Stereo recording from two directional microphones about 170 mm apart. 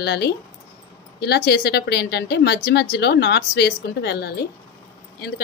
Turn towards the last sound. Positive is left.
turn(degrees=70)  # may be behind; listen again after turning